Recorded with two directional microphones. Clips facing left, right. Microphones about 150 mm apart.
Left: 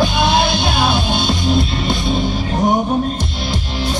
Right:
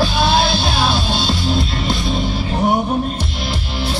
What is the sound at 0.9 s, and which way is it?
Music, 50° left (ahead or behind).